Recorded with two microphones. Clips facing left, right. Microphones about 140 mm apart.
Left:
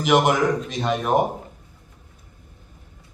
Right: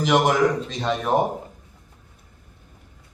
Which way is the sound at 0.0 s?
15° left (ahead or behind).